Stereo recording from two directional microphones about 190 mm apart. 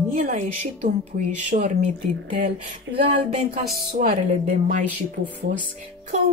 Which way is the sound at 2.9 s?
75° right (ahead or behind).